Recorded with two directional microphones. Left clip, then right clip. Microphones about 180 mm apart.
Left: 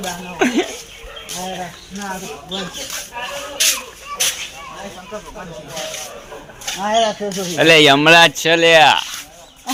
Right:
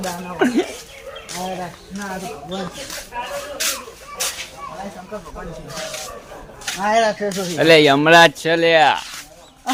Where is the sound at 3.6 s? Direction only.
45° right (ahead or behind).